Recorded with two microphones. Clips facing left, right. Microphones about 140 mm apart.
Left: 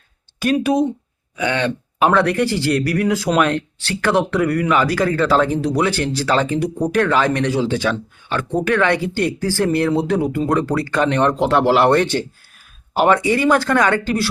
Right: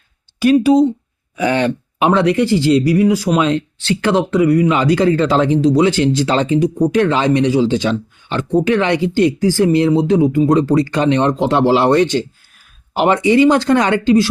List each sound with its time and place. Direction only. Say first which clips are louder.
0.7 s speech: right 6 dB; 10° left (ahead or behind)
1.4 s speech: right 4 dB; 30° right (ahead or behind)